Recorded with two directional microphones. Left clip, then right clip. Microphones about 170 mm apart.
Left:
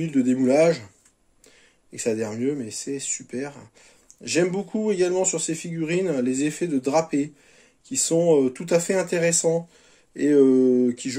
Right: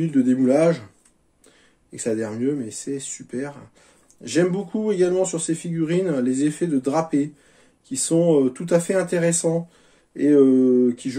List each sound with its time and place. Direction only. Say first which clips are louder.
0.0 s speech: right 2 dB; 20° left (ahead or behind)
2.0 s speech: right 1 dB; 20° left (ahead or behind)